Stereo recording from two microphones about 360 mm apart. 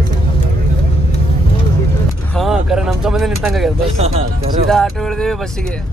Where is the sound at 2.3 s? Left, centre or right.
Centre.